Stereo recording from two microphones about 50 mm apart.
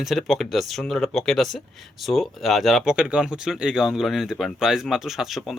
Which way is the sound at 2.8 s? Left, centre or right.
Centre.